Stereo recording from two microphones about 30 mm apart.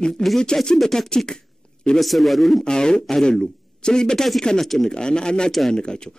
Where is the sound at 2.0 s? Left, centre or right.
Centre.